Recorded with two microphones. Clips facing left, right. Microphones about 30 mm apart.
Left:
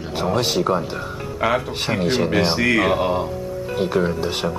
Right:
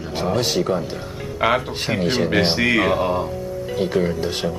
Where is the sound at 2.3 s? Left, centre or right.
Centre.